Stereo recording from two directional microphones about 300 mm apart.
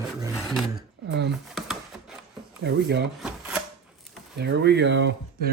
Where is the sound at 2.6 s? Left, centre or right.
Right.